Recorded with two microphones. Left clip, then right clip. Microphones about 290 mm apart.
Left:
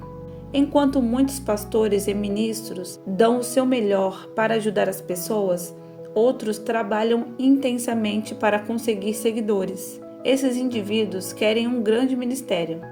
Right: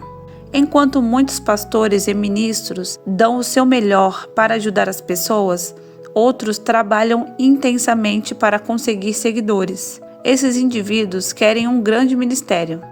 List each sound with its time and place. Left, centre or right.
0.5 s a woman's voice: right